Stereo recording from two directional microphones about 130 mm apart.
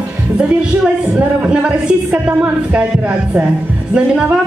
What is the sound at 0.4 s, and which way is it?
Speech, 10° right (ahead or behind).